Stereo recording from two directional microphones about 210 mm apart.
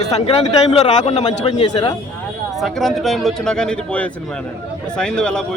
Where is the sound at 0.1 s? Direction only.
25° left (ahead or behind).